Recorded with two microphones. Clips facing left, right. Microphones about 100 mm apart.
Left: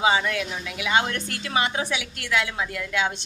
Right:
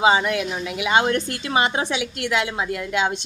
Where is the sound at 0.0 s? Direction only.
25° right (ahead or behind).